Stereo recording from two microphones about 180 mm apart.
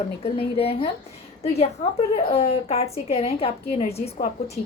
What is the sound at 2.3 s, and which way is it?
A woman's voice, 35° left (ahead or behind).